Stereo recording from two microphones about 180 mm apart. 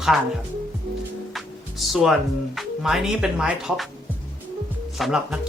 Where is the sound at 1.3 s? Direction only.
Centre (ahead or behind).